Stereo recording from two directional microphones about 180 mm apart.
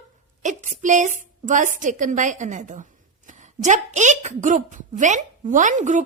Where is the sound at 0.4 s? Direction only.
45° right (ahead or behind).